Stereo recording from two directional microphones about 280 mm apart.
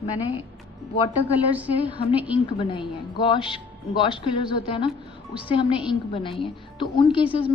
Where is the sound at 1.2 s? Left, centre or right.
Centre.